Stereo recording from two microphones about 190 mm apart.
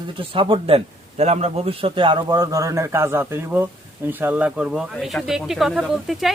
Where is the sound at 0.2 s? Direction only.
25° right (ahead or behind).